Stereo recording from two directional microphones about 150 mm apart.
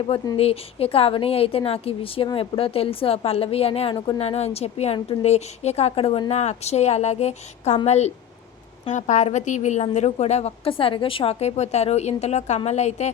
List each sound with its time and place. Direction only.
0.3 s a woman's voice: 40° left (ahead or behind)